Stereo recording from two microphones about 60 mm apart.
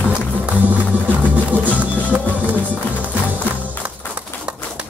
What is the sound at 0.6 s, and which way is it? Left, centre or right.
Music, right.